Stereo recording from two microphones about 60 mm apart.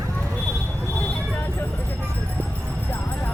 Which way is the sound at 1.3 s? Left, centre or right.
Left.